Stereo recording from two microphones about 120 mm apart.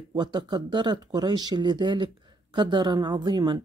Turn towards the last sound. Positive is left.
turn(degrees=-40)  # may be behind; listen again after turning